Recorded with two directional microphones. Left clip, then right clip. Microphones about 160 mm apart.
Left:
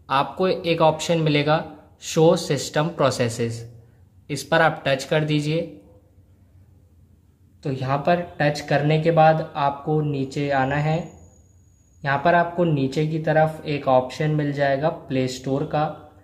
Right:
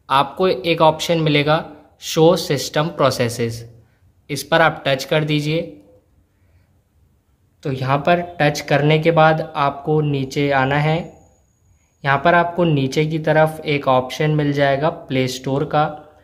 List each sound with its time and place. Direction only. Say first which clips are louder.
0.0 s a man's voice: right 5 dB; 10° right (ahead or behind)
7.6 s speech: right 4 dB; 20° right (ahead or behind)